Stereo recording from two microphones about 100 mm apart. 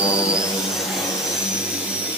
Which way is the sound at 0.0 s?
30° left (ahead or behind).